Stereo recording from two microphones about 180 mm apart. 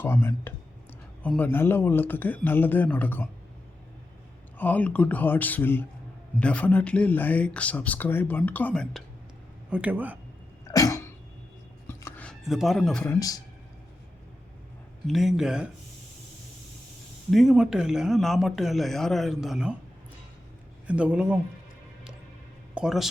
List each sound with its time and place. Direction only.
0.0 s speech: 15° left (ahead or behind)
4.5 s speech: 10° left (ahead or behind); by 10.2 s 10° right (ahead or behind)
10.7 s cough: 20° left (ahead or behind)
11.9 s a sound: 10° left (ahead or behind)
13.1 s a man's voice: 20° left (ahead or behind)
15.0 s a man's voice: centre (ahead or behind)
17.3 s a man's voice: centre (ahead or behind)
20.8 s speech: 5° right (ahead or behind)
22.7 s speech: 5° right (ahead or behind)